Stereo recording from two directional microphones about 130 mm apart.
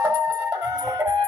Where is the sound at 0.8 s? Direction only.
25° right (ahead or behind).